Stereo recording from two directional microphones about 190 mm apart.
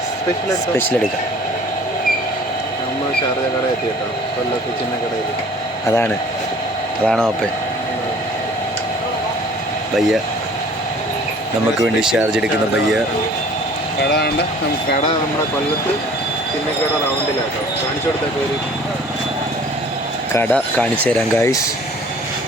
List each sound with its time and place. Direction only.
5.8 s speech: 15° left (ahead or behind)
7.0 s speech: 5° left (ahead or behind)
11.8 s speech: 5° right (ahead or behind)
14.0 s speech: 60° left (ahead or behind)
20.3 s speech: 10° left (ahead or behind)